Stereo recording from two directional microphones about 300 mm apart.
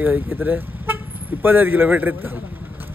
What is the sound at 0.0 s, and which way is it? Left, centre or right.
A man's voice, centre.